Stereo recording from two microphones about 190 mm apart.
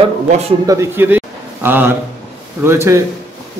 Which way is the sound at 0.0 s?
35° right (ahead or behind).